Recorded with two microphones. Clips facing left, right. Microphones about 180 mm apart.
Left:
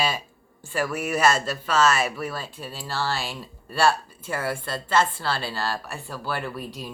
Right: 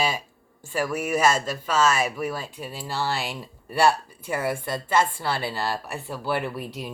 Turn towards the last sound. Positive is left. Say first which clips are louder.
# right 2 dB
turn(degrees=-20)  # may be behind; listen again after turning